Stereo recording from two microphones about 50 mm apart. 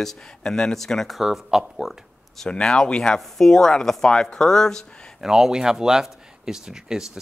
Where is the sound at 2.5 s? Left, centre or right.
Centre.